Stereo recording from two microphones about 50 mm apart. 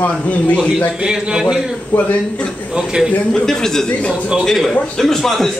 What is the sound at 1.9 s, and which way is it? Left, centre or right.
Speech, left.